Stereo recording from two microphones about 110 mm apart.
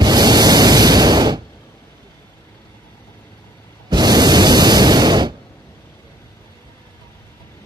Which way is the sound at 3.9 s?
40° right (ahead or behind).